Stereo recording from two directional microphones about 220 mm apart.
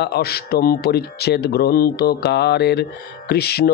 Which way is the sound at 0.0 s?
45° left (ahead or behind).